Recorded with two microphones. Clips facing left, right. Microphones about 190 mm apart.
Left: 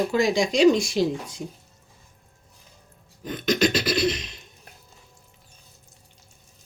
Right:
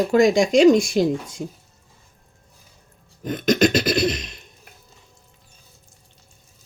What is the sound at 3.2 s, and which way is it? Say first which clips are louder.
Beatboxing: right 4 dB; 45° right (ahead or behind).